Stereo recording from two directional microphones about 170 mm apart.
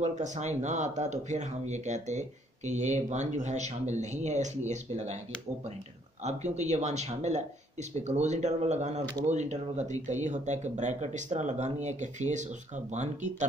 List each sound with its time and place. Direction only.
0.0 s speech: 45° right (ahead or behind)
6.2 s speech: 40° right (ahead or behind)